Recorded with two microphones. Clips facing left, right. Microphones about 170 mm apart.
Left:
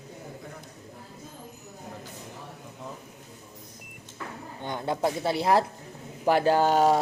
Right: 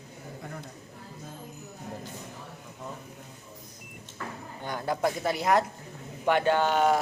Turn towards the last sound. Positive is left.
turn(degrees=35)  # may be behind; listen again after turning